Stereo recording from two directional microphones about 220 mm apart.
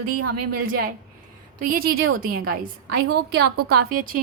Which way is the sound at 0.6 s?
40° right (ahead or behind).